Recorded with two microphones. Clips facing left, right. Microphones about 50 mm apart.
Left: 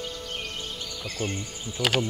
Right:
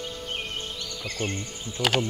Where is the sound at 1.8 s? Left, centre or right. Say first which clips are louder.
Right 1 dB; right.